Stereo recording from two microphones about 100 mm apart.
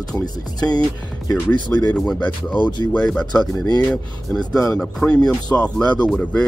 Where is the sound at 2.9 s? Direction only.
10° left (ahead or behind).